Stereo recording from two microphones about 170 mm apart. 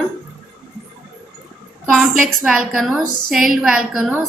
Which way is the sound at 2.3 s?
Centre (ahead or behind).